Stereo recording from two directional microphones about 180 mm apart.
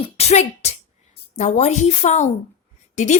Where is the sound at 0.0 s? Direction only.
35° left (ahead or behind).